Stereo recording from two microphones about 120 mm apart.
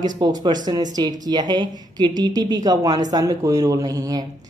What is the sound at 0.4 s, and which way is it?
Speech, 35° right (ahead or behind).